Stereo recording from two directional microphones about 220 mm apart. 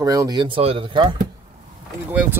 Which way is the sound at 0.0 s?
15° right (ahead or behind).